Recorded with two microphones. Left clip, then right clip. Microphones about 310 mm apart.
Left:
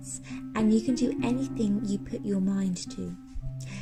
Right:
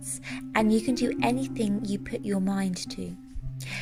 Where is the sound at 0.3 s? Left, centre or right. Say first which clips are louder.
Right 3 dB; right.